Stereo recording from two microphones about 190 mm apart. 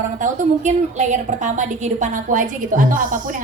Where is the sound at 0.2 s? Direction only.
40° right (ahead or behind).